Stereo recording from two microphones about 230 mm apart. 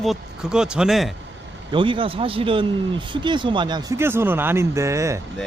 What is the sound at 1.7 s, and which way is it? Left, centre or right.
Speech, right.